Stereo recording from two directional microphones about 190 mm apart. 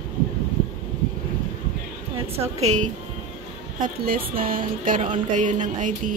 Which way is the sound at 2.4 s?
35° right (ahead or behind).